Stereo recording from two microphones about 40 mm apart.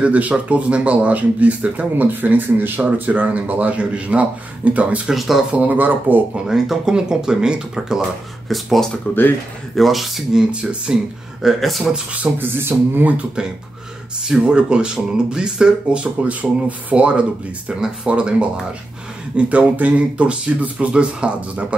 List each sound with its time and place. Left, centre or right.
0.0 s speech: right
2.0 s speech: right
2.8 s speech: right
5.1 s speech: centre
5.5 s speech: right
6.4 s speech: centre
8.5 s speech: centre
10.3 s speech: right
11.4 s speech: centre
12.4 s speech: right
14.4 s speech: right
16.0 s speech: right